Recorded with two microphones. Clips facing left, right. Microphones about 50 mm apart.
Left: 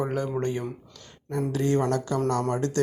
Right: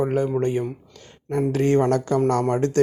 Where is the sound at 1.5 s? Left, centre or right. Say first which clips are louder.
Right 5 dB; right.